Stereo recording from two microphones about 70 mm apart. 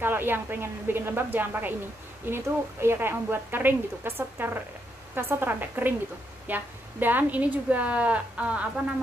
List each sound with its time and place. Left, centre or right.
0.0 s a woman's voice: right